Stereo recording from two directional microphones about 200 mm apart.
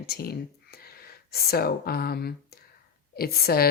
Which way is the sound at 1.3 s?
50° left (ahead or behind).